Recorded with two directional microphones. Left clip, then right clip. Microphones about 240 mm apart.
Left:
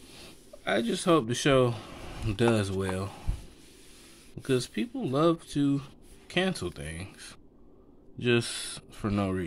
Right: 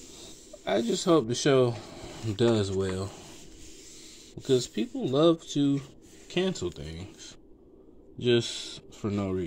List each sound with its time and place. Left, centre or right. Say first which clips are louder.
0.7 s speech: right 1 dB; centre
4.4 s speech: right 3 dB; centre